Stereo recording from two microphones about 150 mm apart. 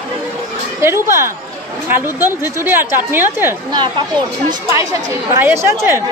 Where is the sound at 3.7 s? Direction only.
30° right (ahead or behind).